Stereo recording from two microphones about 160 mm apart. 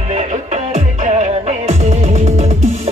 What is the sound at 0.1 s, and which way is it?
Music, 45° right (ahead or behind).